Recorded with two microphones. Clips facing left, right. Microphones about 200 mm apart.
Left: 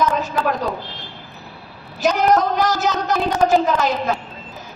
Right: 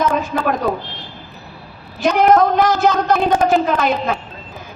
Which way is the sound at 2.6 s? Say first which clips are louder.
Right 5 dB; 55° right (ahead or behind).